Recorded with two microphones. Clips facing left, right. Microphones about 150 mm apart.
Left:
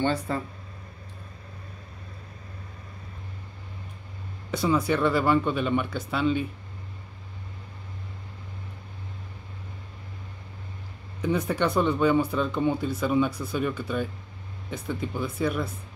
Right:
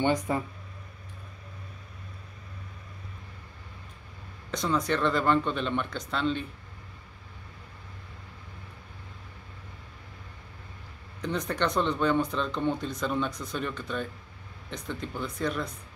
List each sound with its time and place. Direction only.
0.0 s speech: 15° right (ahead or behind)
4.5 s speech: 5° left (ahead or behind)
11.1 s speech: 10° left (ahead or behind)